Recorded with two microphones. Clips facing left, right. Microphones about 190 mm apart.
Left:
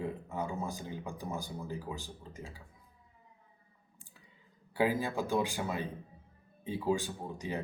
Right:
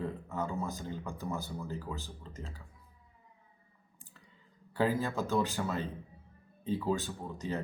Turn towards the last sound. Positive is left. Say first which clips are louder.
# right 1 dB
turn(degrees=15)  # may be behind; listen again after turning